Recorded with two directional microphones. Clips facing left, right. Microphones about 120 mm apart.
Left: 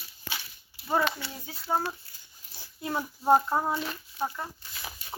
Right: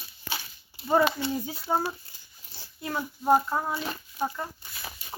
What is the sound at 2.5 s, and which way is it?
Child singing, 15° left (ahead or behind).